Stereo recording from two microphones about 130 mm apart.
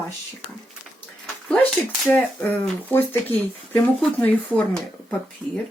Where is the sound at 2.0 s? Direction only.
10° left (ahead or behind).